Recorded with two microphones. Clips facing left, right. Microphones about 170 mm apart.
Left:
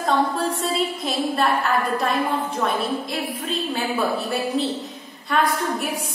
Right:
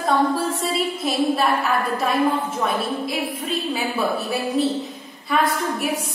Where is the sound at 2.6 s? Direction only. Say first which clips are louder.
Even; 5° right (ahead or behind).